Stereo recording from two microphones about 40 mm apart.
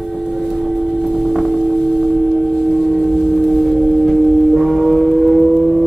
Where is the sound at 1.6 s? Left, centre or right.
Centre.